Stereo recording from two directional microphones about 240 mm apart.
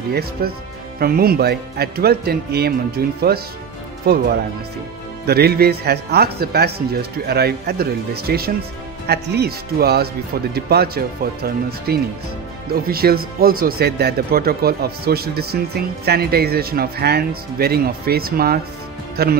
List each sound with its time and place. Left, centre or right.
0.1 s speech: right